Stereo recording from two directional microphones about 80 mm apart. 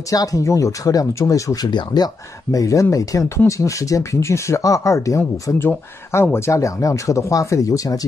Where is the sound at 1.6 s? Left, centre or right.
Left.